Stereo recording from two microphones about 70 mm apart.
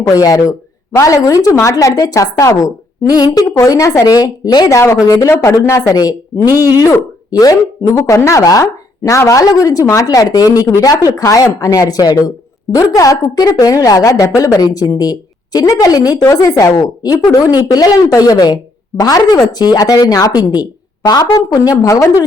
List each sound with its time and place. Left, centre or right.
0.1 s a woman's voice: left
3.6 s speech: left
4.0 s speech: left
4.7 s speech: left
5.2 s speech: left
6.7 s a woman's voice: left
16.3 s a woman's voice: left
18.2 s a woman's voice: left
21.8 s speech: left